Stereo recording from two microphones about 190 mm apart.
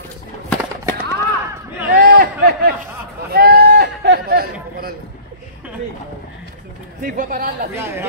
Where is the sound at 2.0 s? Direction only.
60° right (ahead or behind).